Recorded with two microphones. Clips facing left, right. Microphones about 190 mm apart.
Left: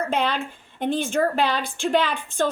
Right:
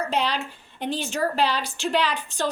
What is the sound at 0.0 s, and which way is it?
A woman's voice, 50° left (ahead or behind).